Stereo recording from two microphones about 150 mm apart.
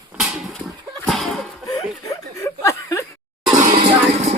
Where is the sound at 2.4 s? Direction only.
20° left (ahead or behind).